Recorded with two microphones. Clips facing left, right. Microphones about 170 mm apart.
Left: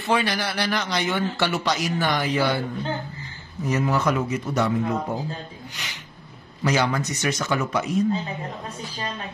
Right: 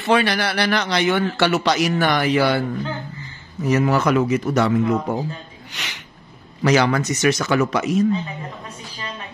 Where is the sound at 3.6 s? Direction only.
80° right.